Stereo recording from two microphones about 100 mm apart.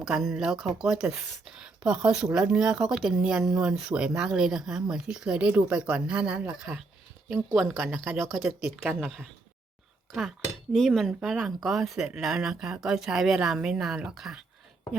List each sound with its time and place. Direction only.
0.0 s speech: 5° right (ahead or behind)
7.5 s speech: centre (ahead or behind)
7.9 s speech: 20° right (ahead or behind)
8.2 s speech: 5° right (ahead or behind)